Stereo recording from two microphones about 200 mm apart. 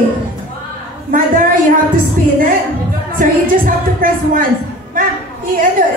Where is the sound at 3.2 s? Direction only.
45° right (ahead or behind).